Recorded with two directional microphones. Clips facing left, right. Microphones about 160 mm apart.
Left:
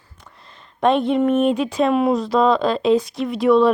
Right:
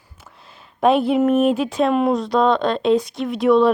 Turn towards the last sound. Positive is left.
turn(degrees=0)  # may be behind; listen again after turning